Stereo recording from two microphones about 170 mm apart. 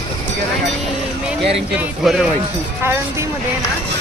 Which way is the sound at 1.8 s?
5° right (ahead or behind).